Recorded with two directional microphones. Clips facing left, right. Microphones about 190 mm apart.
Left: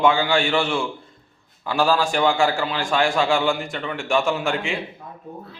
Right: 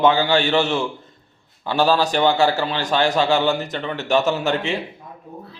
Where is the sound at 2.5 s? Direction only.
20° right (ahead or behind).